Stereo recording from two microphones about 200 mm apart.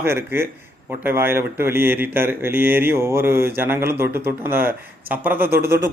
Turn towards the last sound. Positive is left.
turn(degrees=-10)  # may be behind; listen again after turning